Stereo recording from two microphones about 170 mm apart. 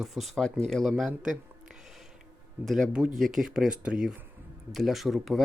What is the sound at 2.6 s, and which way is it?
Speech, centre (ahead or behind).